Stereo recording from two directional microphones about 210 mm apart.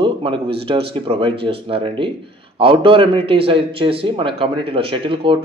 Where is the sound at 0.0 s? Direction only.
25° right (ahead or behind).